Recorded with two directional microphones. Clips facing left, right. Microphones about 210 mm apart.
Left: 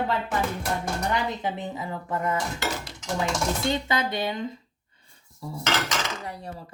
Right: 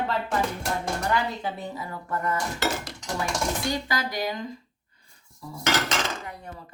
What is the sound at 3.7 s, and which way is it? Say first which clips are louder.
Speech: left 2 dB; 25° left (ahead or behind).